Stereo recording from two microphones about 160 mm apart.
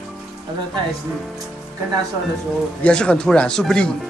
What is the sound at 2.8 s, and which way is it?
Speech, 5° left (ahead or behind).